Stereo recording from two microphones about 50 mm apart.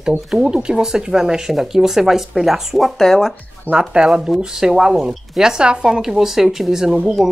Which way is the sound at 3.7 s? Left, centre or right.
Centre.